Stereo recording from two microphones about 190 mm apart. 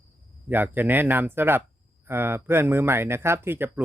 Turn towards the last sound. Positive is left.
turn(degrees=-10)  # may be behind; listen again after turning